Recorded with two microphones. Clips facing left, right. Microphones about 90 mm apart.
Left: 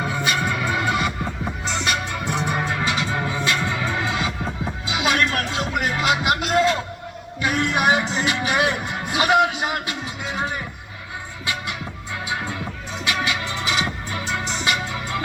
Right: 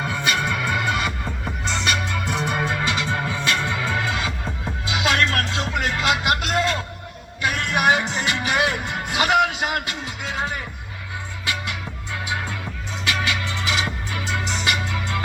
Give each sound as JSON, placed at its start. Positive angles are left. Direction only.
{"t": 0.0, "sound": "music", "side_deg": 20}
{"t": 13.1, "sound": "music", "side_deg": 20}